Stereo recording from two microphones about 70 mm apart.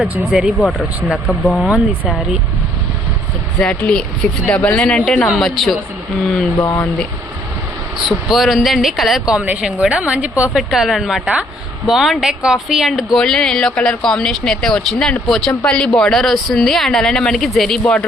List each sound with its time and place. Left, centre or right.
0.3 s a woman's voice: centre
0.6 s speech: centre
1.5 s speech: centre
3.6 s speech: centre
5.4 s speech: centre
6.6 s speech: left
7.9 s speech: centre
9.3 s a woman's voice: centre
10.6 s speech: centre
13.1 s speech: centre